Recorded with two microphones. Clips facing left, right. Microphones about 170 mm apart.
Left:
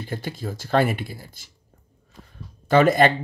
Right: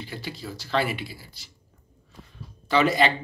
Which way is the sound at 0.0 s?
50° left (ahead or behind).